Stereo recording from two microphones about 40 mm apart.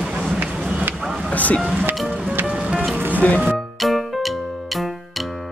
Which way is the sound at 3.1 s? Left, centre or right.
Left.